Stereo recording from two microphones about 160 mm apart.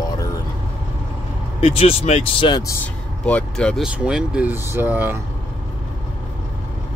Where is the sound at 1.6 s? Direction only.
35° left (ahead or behind).